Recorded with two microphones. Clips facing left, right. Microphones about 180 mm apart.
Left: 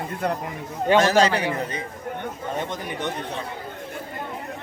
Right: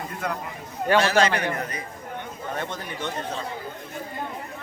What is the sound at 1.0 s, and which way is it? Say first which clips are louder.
Speech: left 3 dB; 40° left (ahead or behind).